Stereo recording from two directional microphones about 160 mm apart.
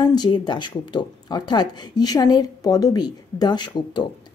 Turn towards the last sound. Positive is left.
turn(degrees=25)  # may be behind; listen again after turning